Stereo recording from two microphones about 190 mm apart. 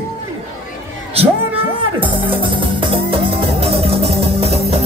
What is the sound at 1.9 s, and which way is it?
Music, 30° right (ahead or behind).